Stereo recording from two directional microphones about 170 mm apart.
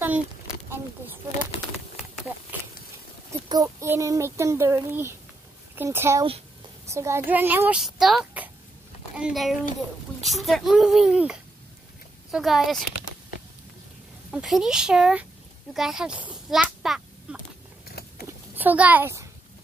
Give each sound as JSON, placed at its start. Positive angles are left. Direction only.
{"t": 3.4, "sound": "a child's voice", "side_deg": -20}
{"t": 14.3, "sound": "a child's voice", "side_deg": 0}
{"t": 16.8, "sound": "a sound", "side_deg": 0}
{"t": 17.8, "sound": "vehicle", "side_deg": 65}
{"t": 18.6, "sound": "a child's voice", "side_deg": -10}